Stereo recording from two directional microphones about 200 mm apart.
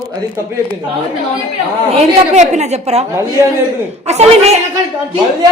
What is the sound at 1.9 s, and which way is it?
A woman's voice, 35° right (ahead or behind).